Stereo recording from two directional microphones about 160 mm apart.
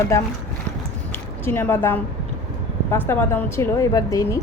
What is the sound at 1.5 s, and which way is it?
A woman's voice, 15° left (ahead or behind).